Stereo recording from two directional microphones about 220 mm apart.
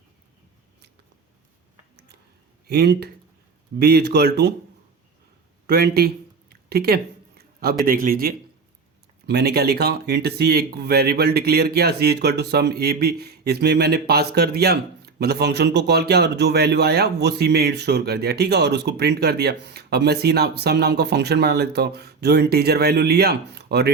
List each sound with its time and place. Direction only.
2.6 s speech: 45° right (ahead or behind)
5.6 s speech: 45° right (ahead or behind)
6.5 s a sound: 45° right (ahead or behind)
7.9 s a man's voice: 40° right (ahead or behind)